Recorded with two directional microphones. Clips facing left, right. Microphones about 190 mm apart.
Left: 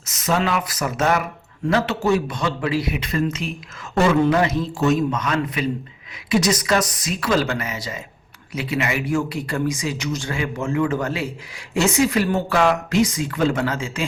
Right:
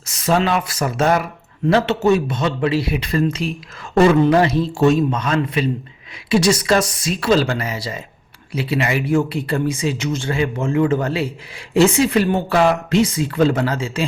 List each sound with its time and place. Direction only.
0.0 s a man's voice: 30° right (ahead or behind)